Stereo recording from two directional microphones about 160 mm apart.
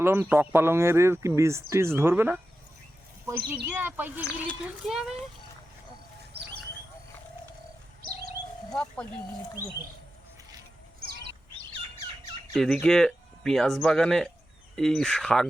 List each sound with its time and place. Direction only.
0.0 s speech: 15° right (ahead or behind)
8.7 s speech: 5° left (ahead or behind)
12.5 s speech: 5° left (ahead or behind)